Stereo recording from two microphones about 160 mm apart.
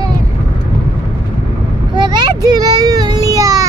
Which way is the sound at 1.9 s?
30° right (ahead or behind).